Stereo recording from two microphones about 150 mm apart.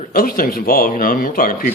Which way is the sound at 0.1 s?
70° left (ahead or behind).